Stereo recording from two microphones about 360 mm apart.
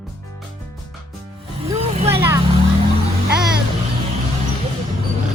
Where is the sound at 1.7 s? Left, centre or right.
Centre.